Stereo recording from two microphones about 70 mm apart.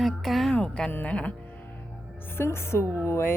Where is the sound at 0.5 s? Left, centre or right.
Centre.